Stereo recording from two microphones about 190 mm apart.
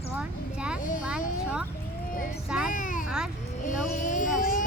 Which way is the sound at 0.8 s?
45° left (ahead or behind).